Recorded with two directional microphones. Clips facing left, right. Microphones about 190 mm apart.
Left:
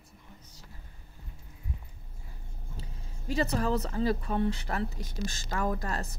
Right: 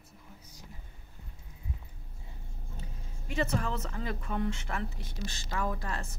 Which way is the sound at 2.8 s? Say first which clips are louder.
Left 1 dB; 35° left (ahead or behind).